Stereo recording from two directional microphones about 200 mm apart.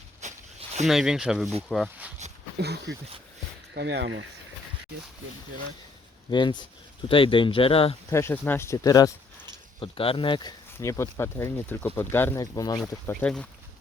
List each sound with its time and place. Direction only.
0.2 s a sound: 35° right (ahead or behind)
0.9 s speech: centre (ahead or behind)
2.6 s speech: 55° right (ahead or behind)
6.3 s speech: 25° left (ahead or behind)
8.1 s speech: 10° left (ahead or behind)
10.8 s speech: 15° left (ahead or behind)
13.1 s speech: 5° left (ahead or behind)